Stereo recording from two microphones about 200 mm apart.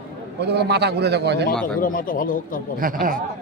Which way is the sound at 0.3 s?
55° right (ahead or behind).